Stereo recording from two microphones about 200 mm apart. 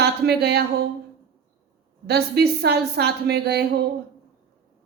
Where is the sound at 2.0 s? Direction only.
55° right (ahead or behind).